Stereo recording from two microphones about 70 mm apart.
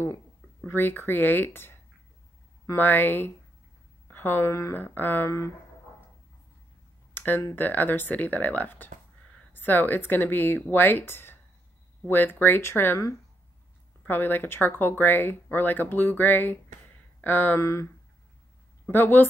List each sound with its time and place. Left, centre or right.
0.7 s speech: left
7.2 s a sound: left
7.5 s speech: left
14.0 s speech: left
17.6 s speech: left
18.9 s speech: left